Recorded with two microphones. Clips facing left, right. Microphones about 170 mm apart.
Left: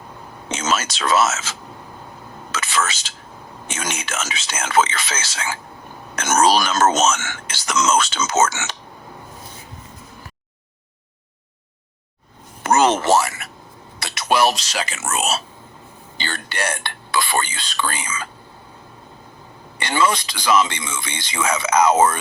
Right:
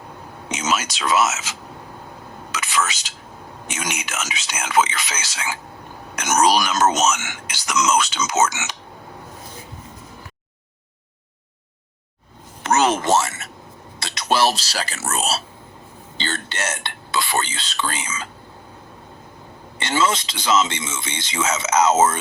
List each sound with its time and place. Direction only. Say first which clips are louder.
0.4 s speech: left 1 dB; 15° right (ahead or behind)
2.5 s a sound: left 1 dB; 15° right (ahead or behind)
3.7 s speech: left 1 dB; 15° right (ahead or behind)
13.0 s a sound: left 2 dB; 20° right (ahead or behind)
14.0 s speech: left 1 dB; 25° right (ahead or behind)
19.8 s speech: left 1 dB; 25° right (ahead or behind)